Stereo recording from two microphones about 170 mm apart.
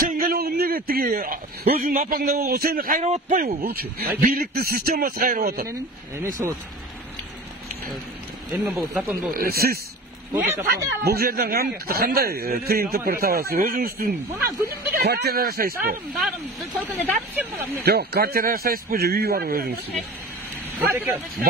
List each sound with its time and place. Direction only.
0.0 s a man's voice: 55° right (ahead or behind)
3.4 s a man's voice: 65° right (ahead or behind)
8.5 s speech: 10° right (ahead or behind)
9.3 s speech: 60° right (ahead or behind)
14.7 s speech: 70° right (ahead or behind)
16.3 s speech: 5° right (ahead or behind)
17.8 s speech: 70° right (ahead or behind)
20.9 s speech: 10° right (ahead or behind)